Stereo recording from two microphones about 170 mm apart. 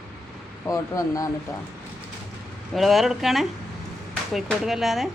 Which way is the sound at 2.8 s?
Centre (ahead or behind).